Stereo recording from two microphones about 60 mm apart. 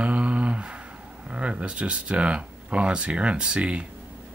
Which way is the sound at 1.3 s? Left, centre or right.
Centre.